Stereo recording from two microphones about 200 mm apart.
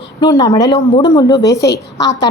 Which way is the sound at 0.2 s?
20° left (ahead or behind).